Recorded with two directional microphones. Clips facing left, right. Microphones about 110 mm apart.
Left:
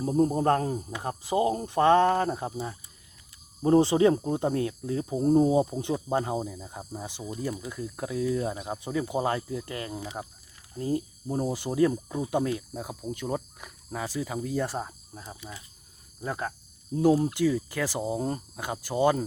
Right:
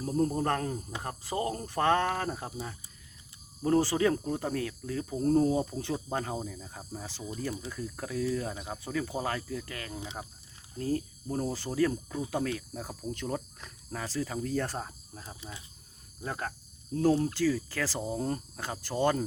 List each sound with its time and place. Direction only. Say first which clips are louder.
0.0 s speech: left 5 dB; 25° left (ahead or behind)
10.2 s speech: left 4 dB; 15° left (ahead or behind)
16.2 s speech: left 4 dB; 5° left (ahead or behind)